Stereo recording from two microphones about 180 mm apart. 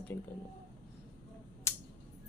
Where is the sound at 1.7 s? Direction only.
15° left (ahead or behind).